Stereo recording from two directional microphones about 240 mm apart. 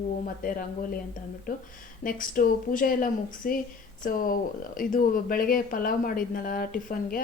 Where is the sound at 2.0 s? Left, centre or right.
Left.